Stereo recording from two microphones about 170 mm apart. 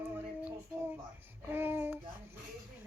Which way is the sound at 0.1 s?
10° right (ahead or behind).